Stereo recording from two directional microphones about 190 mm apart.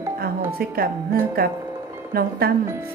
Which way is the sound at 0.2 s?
50° right (ahead or behind).